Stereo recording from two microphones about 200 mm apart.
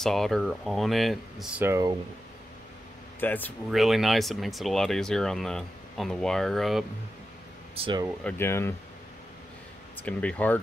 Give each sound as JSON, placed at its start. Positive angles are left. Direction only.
{"t": 0.0, "sound": "speech", "side_deg": 0}
{"t": 3.2, "sound": "speech", "side_deg": 10}
{"t": 7.7, "sound": "speech", "side_deg": -25}
{"t": 8.2, "sound": "speech", "side_deg": 10}
{"t": 10.0, "sound": "speech", "side_deg": 5}